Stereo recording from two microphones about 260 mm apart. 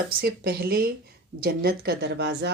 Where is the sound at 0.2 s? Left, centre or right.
Right.